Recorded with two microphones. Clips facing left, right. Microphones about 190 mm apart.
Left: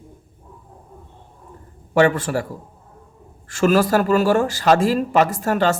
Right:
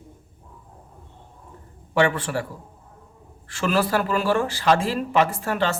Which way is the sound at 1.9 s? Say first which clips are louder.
Left 5 dB; 40° left (ahead or behind).